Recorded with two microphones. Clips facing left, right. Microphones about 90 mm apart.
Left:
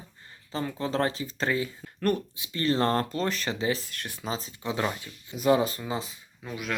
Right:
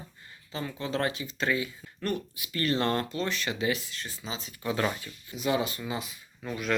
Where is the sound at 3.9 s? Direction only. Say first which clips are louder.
Left 4 dB; 60° left (ahead or behind).